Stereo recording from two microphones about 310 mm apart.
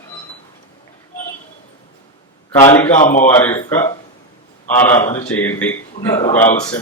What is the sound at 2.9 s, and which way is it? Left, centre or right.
Speech, left.